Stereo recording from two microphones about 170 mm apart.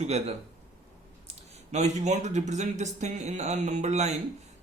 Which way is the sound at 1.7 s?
40° right (ahead or behind).